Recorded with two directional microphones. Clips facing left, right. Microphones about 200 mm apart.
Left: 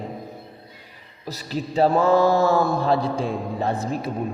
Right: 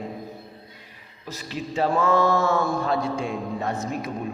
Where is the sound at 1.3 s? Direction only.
40° left (ahead or behind).